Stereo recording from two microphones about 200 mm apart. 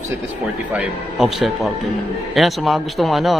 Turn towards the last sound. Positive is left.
turn(degrees=0)  # may be behind; listen again after turning